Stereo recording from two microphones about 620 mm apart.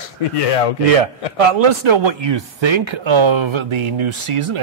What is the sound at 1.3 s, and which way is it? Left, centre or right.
Speech, right.